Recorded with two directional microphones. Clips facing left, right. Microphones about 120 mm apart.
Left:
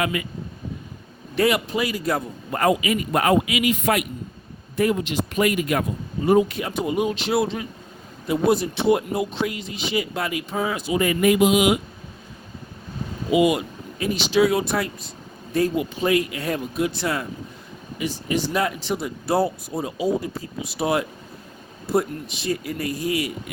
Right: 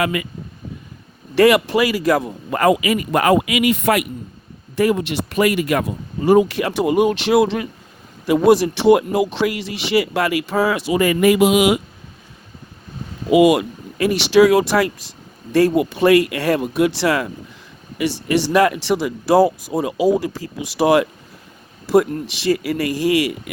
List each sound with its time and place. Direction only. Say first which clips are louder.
0.0 s speech: right 4 dB; 75° right (ahead or behind)
1.4 s a man's voice: right 8 dB; 80° right
13.3 s speech: right 6 dB; 75° right (ahead or behind)
15.5 s speech: right 7 dB; 70° right (ahead or behind); by 17.2 s 90° right
17.9 s speech: right 6 dB; 70° right (ahead or behind); by 23.3 s 90° right